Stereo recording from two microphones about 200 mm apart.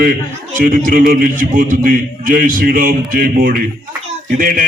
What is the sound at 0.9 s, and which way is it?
Speech, 50° right (ahead or behind).